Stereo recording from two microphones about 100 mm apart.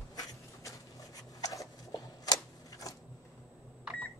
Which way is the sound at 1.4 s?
35° left (ahead or behind).